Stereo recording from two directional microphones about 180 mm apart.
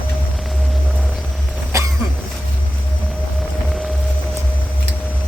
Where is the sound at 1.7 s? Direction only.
15° right (ahead or behind).